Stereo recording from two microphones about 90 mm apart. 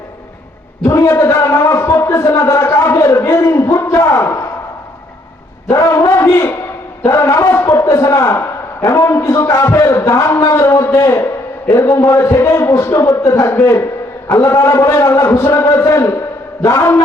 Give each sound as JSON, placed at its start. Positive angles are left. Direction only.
{"t": 0.9, "sound": "a man's voice", "side_deg": 35}
{"t": 5.6, "sound": "a man's voice", "side_deg": 30}